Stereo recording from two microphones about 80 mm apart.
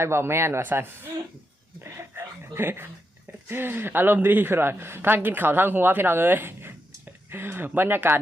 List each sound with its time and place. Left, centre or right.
0.0 s speech: right